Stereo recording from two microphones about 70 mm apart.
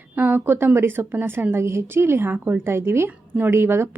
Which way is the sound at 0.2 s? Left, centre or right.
Right.